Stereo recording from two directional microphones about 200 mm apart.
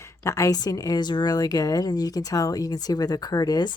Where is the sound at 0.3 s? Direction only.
15° left (ahead or behind).